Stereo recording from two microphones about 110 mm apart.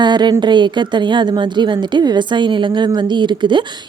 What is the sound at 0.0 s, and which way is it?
A woman's voice, 40° right (ahead or behind).